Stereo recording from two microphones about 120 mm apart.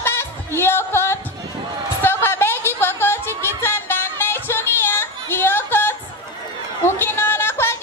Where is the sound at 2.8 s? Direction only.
20° left (ahead or behind).